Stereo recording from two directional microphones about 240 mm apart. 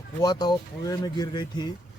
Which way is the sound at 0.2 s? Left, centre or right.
Centre.